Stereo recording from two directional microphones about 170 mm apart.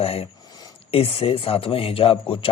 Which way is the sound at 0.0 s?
35° left (ahead or behind).